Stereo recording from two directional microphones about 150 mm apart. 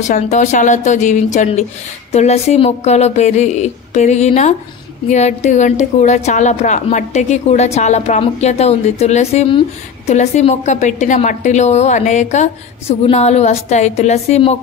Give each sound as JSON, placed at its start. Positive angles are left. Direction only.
{"t": 0.0, "sound": "a woman's voice", "side_deg": 50}